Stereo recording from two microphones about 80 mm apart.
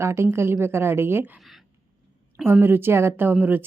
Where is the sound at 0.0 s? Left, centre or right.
Right.